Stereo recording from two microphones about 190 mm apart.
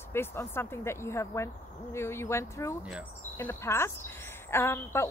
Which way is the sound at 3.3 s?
15° left (ahead or behind).